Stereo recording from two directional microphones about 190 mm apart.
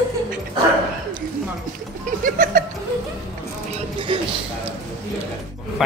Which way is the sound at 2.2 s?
45° right (ahead or behind).